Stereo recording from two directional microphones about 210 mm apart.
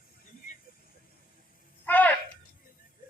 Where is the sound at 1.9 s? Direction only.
10° left (ahead or behind).